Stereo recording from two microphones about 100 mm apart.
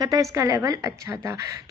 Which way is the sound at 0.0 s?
35° right (ahead or behind).